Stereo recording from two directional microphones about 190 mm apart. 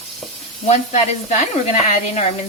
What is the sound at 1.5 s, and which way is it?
Speech, 35° left (ahead or behind).